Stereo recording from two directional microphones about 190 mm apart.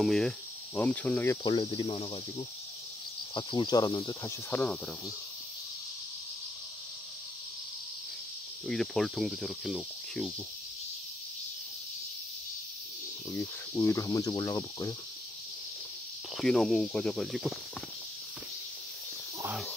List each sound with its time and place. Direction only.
0.0 s speech: 5° left (ahead or behind)
1.4 s speech: 25° left (ahead or behind)
4.6 s speech: 5° left (ahead or behind)
8.6 s speech: centre (ahead or behind)
13.3 s speech: 15° left (ahead or behind)
16.3 s speech: centre (ahead or behind)